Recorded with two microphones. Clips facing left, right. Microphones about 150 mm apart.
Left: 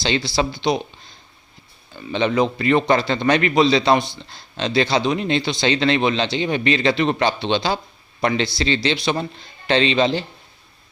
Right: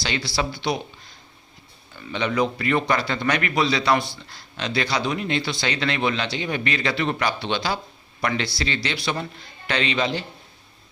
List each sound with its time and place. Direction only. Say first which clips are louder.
0.0 s a man's voice: left 5 dB; 25° left (ahead or behind)